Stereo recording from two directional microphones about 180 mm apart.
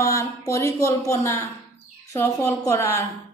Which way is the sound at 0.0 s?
15° left (ahead or behind).